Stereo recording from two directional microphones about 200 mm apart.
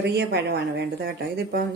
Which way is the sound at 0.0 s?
55° right (ahead or behind).